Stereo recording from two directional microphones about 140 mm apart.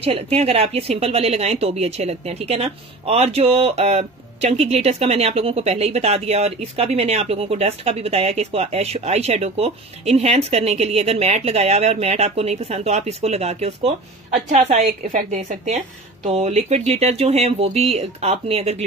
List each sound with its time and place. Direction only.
0.0 s speech: 45° right (ahead or behind)
14.8 s a woman's voice: 70° right (ahead or behind)
16.3 s speech: 50° right (ahead or behind)